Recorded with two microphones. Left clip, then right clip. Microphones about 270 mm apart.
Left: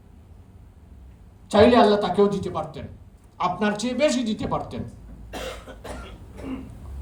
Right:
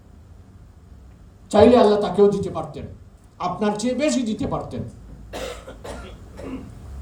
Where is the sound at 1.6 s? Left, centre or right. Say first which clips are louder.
Right 2 dB; centre.